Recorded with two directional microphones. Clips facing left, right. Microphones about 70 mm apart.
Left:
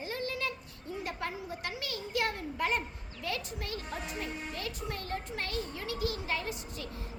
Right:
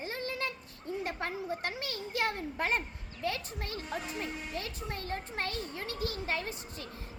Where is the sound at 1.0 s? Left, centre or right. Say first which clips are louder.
Right 1 dB; right.